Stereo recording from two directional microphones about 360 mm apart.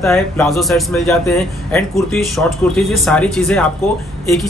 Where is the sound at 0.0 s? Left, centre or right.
Centre.